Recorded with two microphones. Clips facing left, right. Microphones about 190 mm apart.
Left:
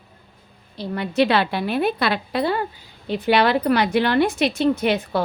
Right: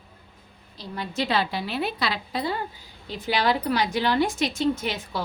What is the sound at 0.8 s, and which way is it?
A woman's voice, 65° left (ahead or behind).